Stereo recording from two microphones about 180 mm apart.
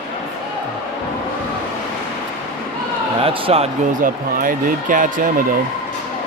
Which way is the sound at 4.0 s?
50° right (ahead or behind).